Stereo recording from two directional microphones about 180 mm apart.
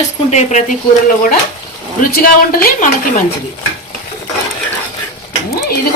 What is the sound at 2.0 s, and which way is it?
Speech, 55° left (ahead or behind).